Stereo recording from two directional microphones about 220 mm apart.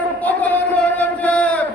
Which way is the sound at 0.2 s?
5° left (ahead or behind).